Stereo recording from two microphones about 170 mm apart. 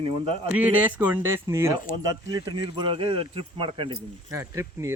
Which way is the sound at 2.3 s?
30° right (ahead or behind).